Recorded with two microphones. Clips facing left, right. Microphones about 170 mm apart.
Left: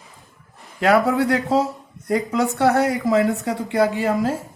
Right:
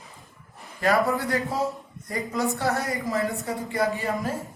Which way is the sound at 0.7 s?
80° left.